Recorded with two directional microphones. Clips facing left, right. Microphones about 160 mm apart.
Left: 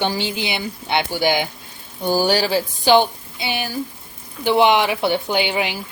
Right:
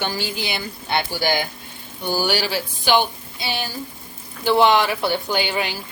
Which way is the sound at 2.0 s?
45° left (ahead or behind).